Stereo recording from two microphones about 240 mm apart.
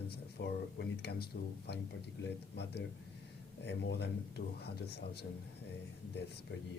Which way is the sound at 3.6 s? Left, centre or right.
Left.